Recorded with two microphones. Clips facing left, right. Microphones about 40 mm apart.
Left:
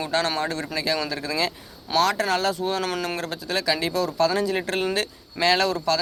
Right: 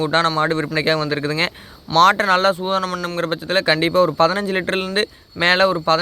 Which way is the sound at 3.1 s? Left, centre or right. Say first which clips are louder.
Right 8 dB; right.